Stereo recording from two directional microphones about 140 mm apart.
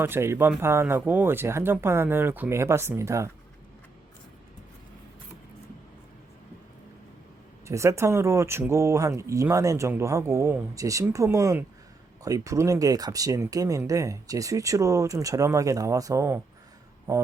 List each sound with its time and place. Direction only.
0.0 s speech: 15° right (ahead or behind)
7.7 s speech: 20° right (ahead or behind)